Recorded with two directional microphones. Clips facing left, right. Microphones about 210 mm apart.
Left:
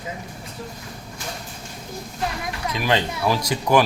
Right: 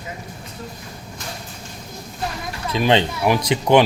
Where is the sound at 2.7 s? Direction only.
25° right (ahead or behind).